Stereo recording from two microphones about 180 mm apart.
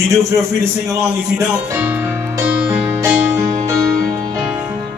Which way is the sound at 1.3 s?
10° right (ahead or behind).